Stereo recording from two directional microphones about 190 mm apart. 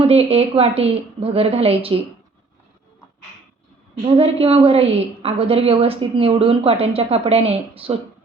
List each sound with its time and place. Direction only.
0.0 s a woman's voice: 30° right (ahead or behind)
4.0 s a woman's voice: 30° right (ahead or behind)